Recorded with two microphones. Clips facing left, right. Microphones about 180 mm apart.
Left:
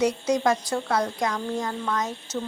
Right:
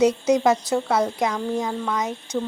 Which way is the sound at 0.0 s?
20° right (ahead or behind).